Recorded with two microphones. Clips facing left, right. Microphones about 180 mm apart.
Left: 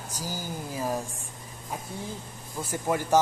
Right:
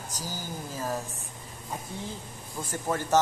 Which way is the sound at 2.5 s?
10° left (ahead or behind).